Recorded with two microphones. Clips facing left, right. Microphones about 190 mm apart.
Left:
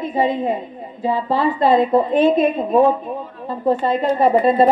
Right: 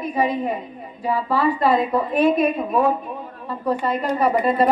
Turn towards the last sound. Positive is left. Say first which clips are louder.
# left 4 dB
turn(degrees=25)  # may be behind; listen again after turning